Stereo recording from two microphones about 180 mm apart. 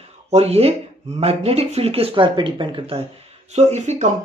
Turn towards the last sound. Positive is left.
turn(degrees=-40)  # may be behind; listen again after turning